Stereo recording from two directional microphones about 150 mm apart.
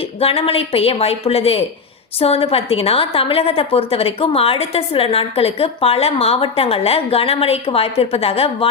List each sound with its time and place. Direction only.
0.2 s a woman's voice: 40° left (ahead or behind)